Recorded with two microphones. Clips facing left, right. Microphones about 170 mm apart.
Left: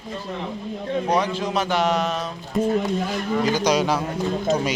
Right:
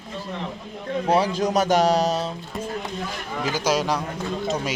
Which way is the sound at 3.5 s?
5° right (ahead or behind).